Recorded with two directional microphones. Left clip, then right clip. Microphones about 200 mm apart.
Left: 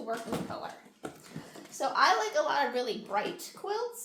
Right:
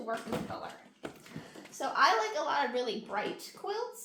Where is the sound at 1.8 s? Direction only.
20° left (ahead or behind).